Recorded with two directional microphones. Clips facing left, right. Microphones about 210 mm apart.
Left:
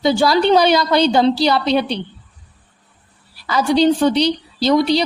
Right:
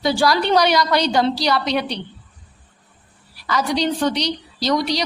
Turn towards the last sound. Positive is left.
turn(degrees=25)  # may be behind; listen again after turning